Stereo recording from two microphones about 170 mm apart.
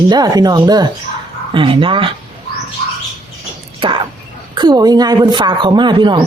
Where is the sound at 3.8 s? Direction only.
30° right (ahead or behind).